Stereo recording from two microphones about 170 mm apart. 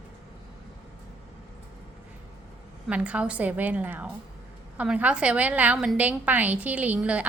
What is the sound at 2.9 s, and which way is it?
A woman's voice, 5° right (ahead or behind).